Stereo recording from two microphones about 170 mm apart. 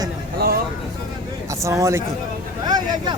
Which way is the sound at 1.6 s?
15° right (ahead or behind).